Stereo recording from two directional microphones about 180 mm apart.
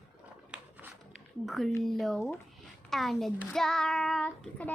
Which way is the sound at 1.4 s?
Centre (ahead or behind).